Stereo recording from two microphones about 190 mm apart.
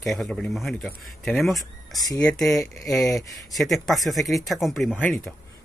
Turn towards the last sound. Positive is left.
turn(degrees=10)  # may be behind; listen again after turning